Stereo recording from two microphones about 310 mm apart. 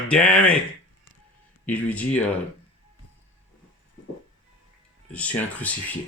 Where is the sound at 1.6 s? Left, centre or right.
Centre.